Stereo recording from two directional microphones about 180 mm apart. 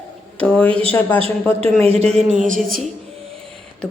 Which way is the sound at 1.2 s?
30° right (ahead or behind).